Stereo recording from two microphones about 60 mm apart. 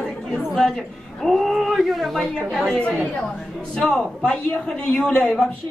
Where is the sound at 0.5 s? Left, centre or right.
Centre.